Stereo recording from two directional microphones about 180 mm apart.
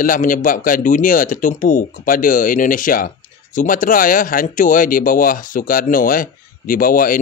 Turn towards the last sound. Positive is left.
turn(degrees=50)  # may be behind; listen again after turning